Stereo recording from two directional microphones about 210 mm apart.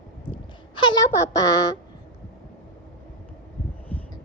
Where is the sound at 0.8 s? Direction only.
20° left (ahead or behind).